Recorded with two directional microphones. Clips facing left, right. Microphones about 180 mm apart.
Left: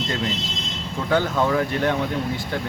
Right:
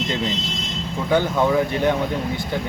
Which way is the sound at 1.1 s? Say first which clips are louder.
Right 2 dB; 15° right (ahead or behind).